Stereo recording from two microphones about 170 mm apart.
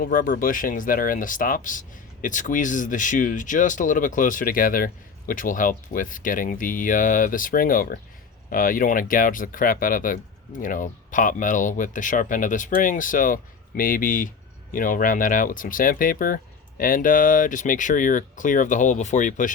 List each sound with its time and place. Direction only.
0.0 s speech: 55° left (ahead or behind)